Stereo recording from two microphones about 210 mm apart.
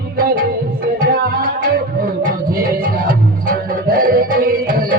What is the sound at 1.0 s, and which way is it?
Music, 45° right (ahead or behind).